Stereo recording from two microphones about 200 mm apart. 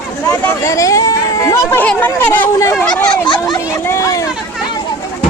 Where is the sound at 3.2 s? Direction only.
20° left (ahead or behind).